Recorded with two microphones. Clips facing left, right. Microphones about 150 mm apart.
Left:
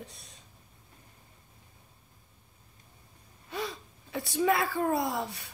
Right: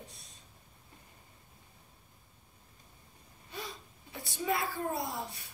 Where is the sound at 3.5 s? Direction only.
80° left.